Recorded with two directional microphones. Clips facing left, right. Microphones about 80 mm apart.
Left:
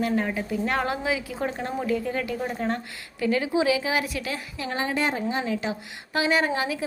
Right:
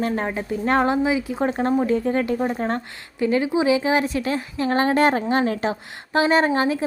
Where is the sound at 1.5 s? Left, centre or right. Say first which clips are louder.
Right 7 dB; right.